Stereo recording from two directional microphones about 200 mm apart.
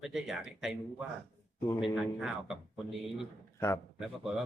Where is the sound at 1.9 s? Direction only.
Centre (ahead or behind).